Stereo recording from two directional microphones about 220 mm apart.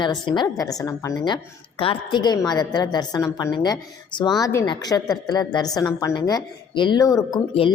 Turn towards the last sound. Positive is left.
turn(degrees=20)  # may be behind; listen again after turning